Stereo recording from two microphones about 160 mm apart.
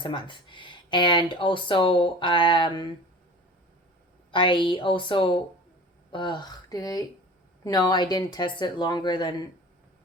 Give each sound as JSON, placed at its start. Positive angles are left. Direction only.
{"t": 0.0, "sound": "speech", "side_deg": 30}
{"t": 4.3, "sound": "speech", "side_deg": 30}